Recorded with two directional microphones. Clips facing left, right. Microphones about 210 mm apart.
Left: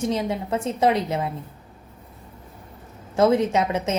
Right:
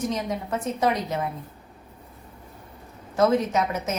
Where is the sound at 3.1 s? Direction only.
25° left (ahead or behind).